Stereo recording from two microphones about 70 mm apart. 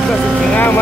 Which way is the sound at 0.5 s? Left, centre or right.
Left.